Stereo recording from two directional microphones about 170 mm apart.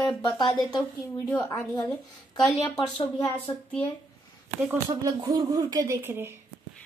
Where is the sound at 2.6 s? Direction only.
20° left (ahead or behind).